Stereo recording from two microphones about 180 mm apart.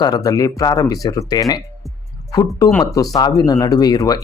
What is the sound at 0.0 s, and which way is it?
Speech, 20° left (ahead or behind).